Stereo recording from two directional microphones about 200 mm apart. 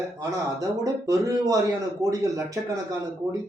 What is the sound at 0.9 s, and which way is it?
Speech, 15° right (ahead or behind).